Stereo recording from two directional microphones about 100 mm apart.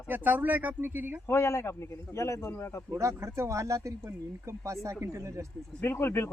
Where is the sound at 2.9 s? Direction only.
30° right (ahead or behind).